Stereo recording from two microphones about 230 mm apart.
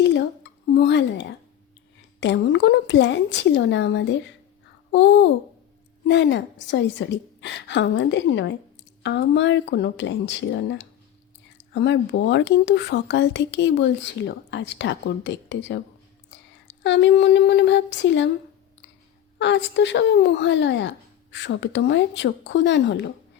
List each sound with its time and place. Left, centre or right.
0.0 s a sound: left
2.2 s speech: left
19.4 s speech: left